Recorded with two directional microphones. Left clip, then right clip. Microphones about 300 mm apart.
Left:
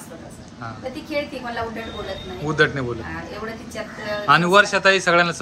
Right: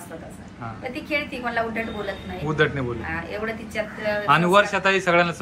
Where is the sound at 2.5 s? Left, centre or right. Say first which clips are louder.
Left 3 dB; centre.